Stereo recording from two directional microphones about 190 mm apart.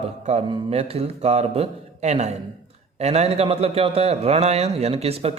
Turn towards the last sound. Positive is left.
turn(degrees=-30)  # may be behind; listen again after turning